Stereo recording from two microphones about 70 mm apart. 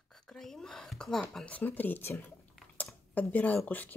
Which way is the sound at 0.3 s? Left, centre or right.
Centre.